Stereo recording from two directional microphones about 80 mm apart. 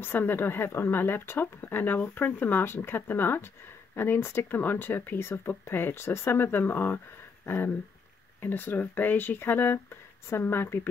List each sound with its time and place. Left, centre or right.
0.0 s speech: left